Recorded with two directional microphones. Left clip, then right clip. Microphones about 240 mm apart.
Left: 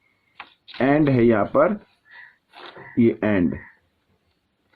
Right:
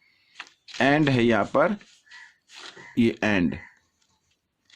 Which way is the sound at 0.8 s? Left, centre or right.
Right.